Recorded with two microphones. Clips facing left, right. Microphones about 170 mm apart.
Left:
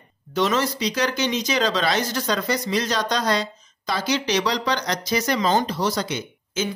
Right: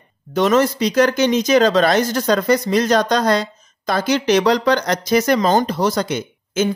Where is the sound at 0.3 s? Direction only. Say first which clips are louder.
Right 7 dB; 50° right (ahead or behind).